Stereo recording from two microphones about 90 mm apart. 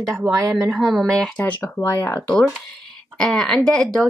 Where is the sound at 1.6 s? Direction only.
30° left (ahead or behind).